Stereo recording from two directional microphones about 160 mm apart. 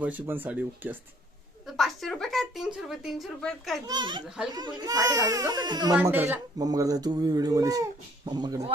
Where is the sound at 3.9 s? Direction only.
25° right (ahead or behind).